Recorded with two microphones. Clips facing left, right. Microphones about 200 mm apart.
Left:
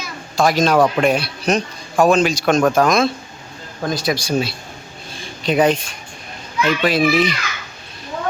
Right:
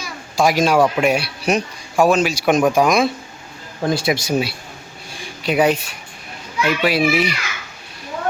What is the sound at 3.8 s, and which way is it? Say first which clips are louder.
Speech: right 2 dB; 25° right (ahead or behind).